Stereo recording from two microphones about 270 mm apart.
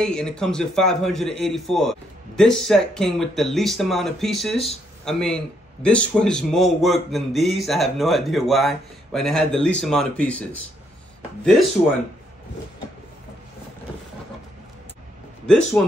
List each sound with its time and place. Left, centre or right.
0.0 s speech: centre
15.4 s speech: centre